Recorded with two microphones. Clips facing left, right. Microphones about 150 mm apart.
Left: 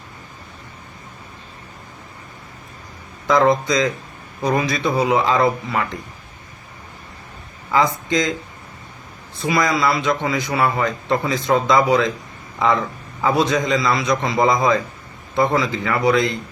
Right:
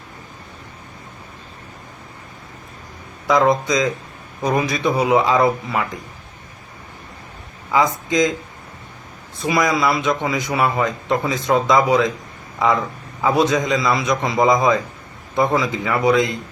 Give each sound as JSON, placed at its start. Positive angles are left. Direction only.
{"t": 3.2, "sound": "a man's voice", "side_deg": -15}
{"t": 7.7, "sound": "speech", "side_deg": -15}
{"t": 9.4, "sound": "a man's voice", "side_deg": -15}